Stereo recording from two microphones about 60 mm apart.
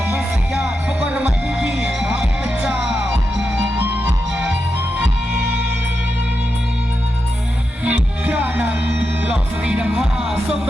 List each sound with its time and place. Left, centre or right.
1.0 s music: right
3.8 s music: right
7.9 s music: right
10.0 s music: centre